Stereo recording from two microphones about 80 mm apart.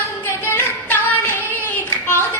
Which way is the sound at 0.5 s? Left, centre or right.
Left.